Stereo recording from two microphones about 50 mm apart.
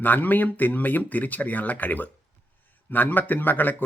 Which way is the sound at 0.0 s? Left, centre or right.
Left.